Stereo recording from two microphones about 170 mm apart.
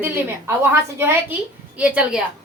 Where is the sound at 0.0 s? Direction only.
15° right (ahead or behind).